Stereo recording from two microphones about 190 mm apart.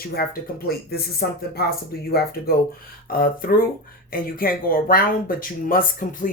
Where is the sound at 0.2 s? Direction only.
55° left (ahead or behind).